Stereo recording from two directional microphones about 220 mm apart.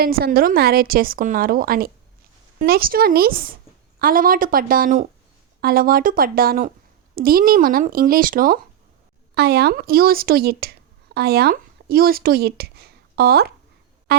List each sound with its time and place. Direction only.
0.0 s a woman's voice: 45° right (ahead or behind)
14.1 s music: 45° right (ahead or behind)